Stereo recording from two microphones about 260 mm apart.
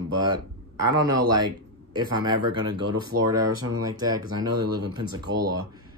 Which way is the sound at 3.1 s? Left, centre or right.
Right.